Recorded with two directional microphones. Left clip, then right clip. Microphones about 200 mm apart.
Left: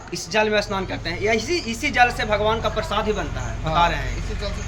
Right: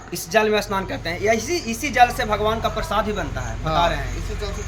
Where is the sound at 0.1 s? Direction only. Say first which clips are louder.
Right 2 dB; 45° right (ahead or behind).